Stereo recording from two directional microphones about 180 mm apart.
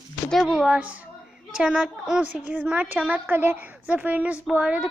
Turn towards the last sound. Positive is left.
turn(degrees=-5)  # may be behind; listen again after turning